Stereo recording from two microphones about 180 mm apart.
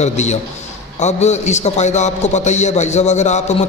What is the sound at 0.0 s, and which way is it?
A man's voice, 40° left (ahead or behind).